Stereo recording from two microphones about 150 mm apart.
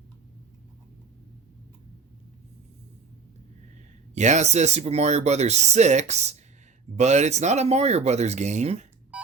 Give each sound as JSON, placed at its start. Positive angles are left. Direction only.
{"t": 4.1, "sound": "speech", "side_deg": -50}